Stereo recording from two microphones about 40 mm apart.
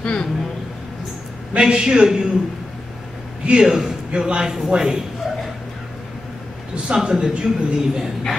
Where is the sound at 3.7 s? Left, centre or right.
Centre.